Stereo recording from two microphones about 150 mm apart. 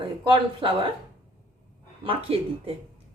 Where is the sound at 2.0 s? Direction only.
35° right (ahead or behind).